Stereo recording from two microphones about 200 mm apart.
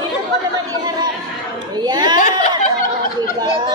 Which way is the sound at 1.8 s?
20° right (ahead or behind).